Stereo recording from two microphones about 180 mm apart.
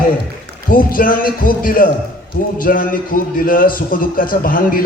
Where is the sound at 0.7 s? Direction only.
50° left (ahead or behind).